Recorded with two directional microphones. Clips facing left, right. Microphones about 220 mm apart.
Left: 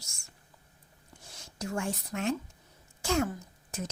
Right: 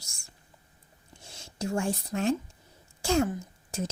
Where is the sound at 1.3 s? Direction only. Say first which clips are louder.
Right 5 dB; 25° right (ahead or behind).